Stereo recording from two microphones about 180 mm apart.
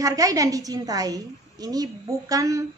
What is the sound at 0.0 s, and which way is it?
A woman's voice, 20° right (ahead or behind).